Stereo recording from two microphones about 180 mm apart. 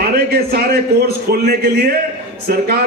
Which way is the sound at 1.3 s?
60° right (ahead or behind).